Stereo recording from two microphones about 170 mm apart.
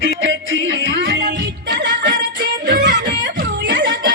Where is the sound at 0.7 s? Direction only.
90° right.